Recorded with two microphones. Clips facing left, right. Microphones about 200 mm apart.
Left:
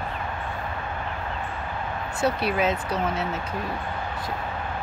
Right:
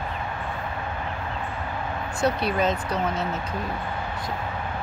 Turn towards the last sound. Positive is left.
turn(degrees=5)  # may be behind; listen again after turning